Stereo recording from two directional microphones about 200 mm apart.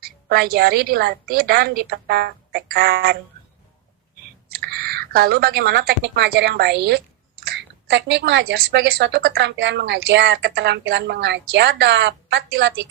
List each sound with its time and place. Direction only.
0.0 s a woman's voice: 50° right (ahead or behind)
4.5 s speech: 50° right (ahead or behind)